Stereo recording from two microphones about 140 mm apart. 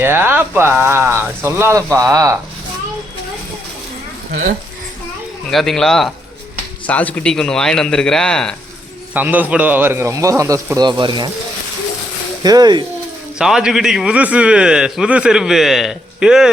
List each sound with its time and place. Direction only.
0.0 s speech: 15° right (ahead or behind)
5.5 s a man's voice: 5° left (ahead or behind)
9.1 s speech: 10° right (ahead or behind); by 11.3 s 30° right (ahead or behind)
12.4 s speech: 30° right (ahead or behind)
13.4 s a man's voice: 5° right (ahead or behind)